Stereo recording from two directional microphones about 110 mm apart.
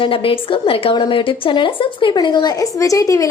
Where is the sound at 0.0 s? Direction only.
55° left (ahead or behind).